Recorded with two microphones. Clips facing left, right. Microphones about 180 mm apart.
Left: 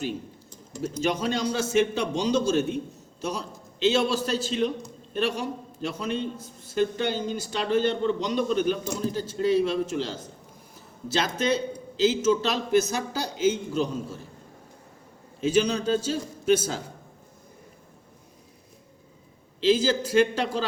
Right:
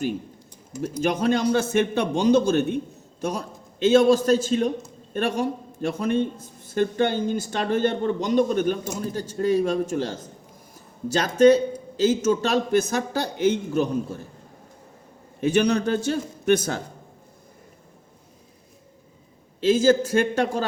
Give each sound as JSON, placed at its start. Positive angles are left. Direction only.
{"t": 1.0, "sound": "a man's voice", "side_deg": -50}
{"t": 15.4, "sound": "a man's voice", "side_deg": -65}
{"t": 19.6, "sound": "a man's voice", "side_deg": -50}